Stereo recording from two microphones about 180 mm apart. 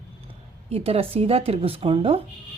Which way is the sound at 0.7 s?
35° right (ahead or behind).